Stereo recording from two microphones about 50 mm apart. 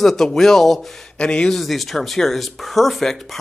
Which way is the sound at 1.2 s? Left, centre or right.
Centre.